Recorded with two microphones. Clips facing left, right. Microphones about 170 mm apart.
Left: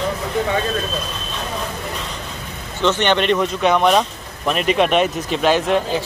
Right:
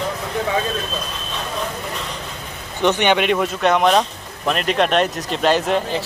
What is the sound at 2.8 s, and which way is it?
Speech, 15° right (ahead or behind).